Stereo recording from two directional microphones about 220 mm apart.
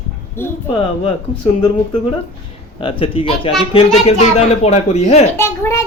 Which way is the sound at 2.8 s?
25° left (ahead or behind).